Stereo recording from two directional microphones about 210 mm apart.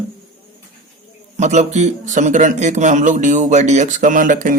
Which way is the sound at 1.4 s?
35° right (ahead or behind).